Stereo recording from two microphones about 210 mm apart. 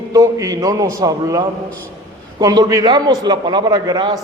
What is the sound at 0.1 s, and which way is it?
A man's voice, 15° right (ahead or behind).